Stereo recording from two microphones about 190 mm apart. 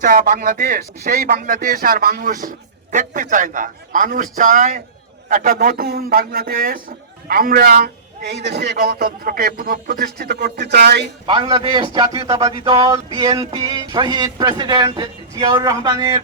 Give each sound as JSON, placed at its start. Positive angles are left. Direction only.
{"t": 0.0, "sound": "a man's voice", "side_deg": -45}
{"t": 11.3, "sound": "speech", "side_deg": -25}
{"t": 13.1, "sound": "music", "side_deg": -15}
{"t": 13.4, "sound": "speech", "side_deg": -25}